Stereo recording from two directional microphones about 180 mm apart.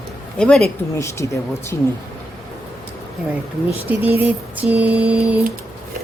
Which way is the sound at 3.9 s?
10° right (ahead or behind).